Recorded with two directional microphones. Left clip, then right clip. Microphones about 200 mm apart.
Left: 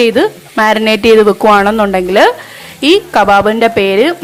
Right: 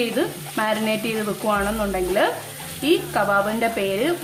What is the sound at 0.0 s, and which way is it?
Speech, 40° left (ahead or behind).